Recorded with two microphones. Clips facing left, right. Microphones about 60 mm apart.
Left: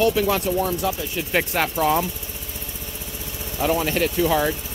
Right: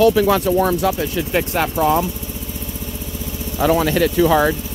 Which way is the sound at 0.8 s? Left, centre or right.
Right.